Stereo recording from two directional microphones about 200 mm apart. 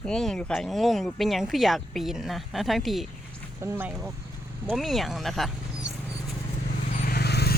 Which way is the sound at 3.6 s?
10° right (ahead or behind).